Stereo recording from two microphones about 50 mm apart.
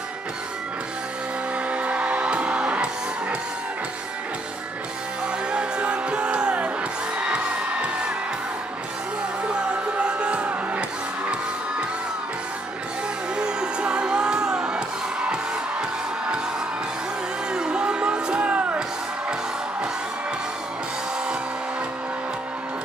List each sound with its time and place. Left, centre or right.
1.7 s music: right
5.5 s music: right
9.4 s music: right
13.4 s music: centre
17.5 s music: centre
18.5 s music: right